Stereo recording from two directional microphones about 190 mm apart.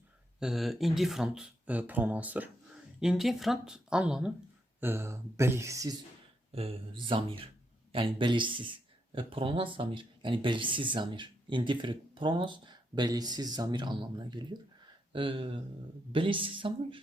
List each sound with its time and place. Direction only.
0.3 s speech: centre (ahead or behind)
6.5 s speech: 30° right (ahead or behind)